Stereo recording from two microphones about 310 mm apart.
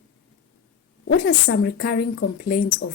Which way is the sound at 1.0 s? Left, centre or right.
Left.